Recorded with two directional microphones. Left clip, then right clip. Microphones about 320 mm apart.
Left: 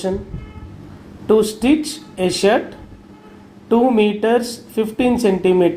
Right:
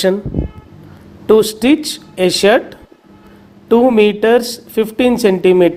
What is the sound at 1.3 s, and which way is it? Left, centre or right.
Speech, right.